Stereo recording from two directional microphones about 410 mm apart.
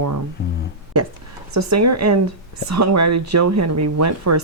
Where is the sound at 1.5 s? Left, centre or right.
Right.